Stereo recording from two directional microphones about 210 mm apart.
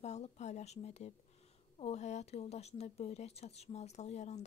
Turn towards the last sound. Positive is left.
turn(degrees=30)  # may be behind; listen again after turning